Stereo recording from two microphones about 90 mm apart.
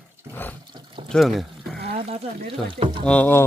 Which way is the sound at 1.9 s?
85° right.